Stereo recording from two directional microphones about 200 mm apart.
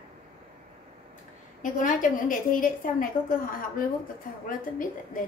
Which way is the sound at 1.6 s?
40° left (ahead or behind).